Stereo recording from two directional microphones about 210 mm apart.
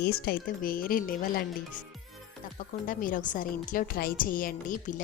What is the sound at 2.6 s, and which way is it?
A woman's voice, 40° left (ahead or behind).